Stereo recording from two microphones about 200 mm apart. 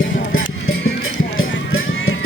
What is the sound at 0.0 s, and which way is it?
Music, 85° left.